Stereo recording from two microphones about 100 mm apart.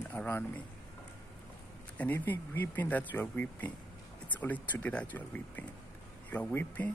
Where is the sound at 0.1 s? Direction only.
20° left (ahead or behind).